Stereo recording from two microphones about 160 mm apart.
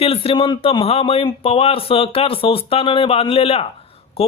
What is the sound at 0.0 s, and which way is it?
Speech, 35° left (ahead or behind).